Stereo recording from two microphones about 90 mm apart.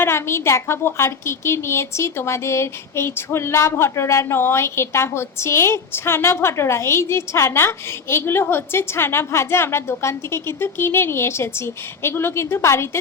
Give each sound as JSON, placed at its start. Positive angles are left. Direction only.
{"t": 0.0, "sound": "a woman's voice", "side_deg": 30}